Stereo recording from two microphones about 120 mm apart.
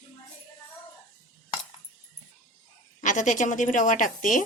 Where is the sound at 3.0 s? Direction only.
90° left.